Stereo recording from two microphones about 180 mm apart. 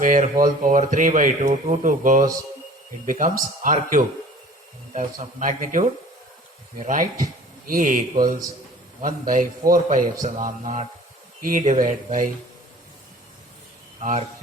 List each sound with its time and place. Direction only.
0.0 s speech: 45° right (ahead or behind)
14.0 s speech: 45° right (ahead or behind)